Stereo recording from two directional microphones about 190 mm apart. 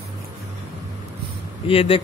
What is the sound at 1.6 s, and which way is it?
Speech, 30° left (ahead or behind).